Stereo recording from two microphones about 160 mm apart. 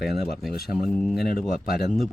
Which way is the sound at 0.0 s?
80° left.